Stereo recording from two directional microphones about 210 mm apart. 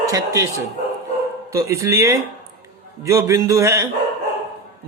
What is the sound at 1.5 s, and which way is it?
Speech, 15° right (ahead or behind).